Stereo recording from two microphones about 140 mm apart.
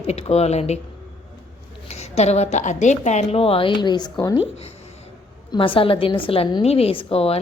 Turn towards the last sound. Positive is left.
turn(degrees=45)  # may be behind; listen again after turning